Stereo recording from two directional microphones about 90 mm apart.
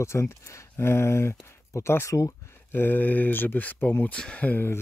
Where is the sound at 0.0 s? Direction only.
30° left (ahead or behind).